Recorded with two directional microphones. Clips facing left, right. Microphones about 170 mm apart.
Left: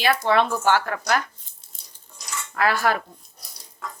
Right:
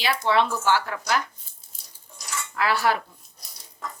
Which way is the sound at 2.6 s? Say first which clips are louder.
Left 1 dB; 50° left (ahead or behind).